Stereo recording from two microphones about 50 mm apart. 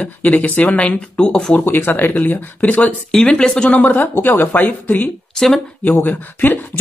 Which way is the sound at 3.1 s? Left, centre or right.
Centre.